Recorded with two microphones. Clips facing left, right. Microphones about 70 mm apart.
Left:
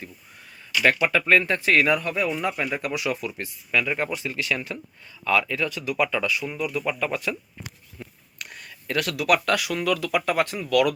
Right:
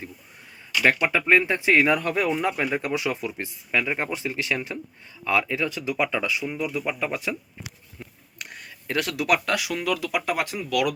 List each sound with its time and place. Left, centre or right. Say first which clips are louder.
1.0 s speech: even; centre
2.0 s a man's voice: right 2 dB; right; by 7.3 s centre
7.9 s a sound: left 1 dB; right
9.7 s speech: left 2 dB; centre